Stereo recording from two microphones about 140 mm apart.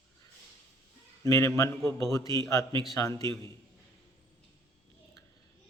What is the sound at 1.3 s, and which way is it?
A man's voice, 20° left (ahead or behind).